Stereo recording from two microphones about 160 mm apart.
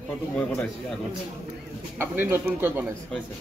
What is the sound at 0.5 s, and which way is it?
Speech, centre (ahead or behind).